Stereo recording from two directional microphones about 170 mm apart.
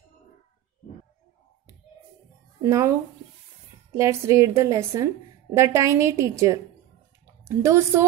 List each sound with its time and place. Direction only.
2.6 s a woman's voice: 15° right (ahead or behind)
3.9 s a woman's voice: 15° right (ahead or behind)